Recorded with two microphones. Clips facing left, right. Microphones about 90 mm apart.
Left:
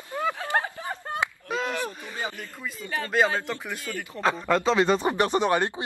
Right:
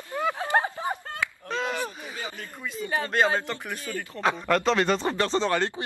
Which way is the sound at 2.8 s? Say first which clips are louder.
Right 3 dB; 25° right (ahead or behind).